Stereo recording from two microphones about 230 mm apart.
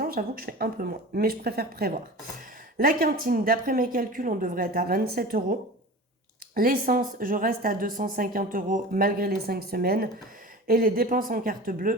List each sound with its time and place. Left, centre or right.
0.0 s speech: right